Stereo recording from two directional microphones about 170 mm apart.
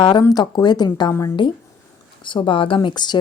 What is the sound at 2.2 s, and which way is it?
Speech, 30° left (ahead or behind).